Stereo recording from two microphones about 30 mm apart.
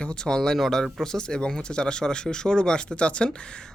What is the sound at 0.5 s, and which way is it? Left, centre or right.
Speech, centre.